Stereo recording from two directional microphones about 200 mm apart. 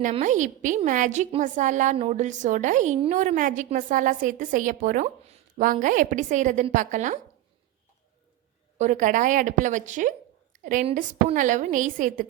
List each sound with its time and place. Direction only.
0.0 s a woman's voice: 40° right (ahead or behind)
8.8 s a woman's voice: 40° right (ahead or behind)